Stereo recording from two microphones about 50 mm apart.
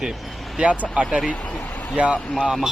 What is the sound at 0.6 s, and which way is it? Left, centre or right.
Speech, right.